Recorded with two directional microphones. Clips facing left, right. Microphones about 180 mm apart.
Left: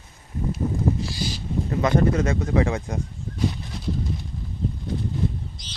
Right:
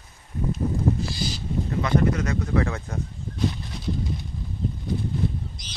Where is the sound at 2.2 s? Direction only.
25° left (ahead or behind).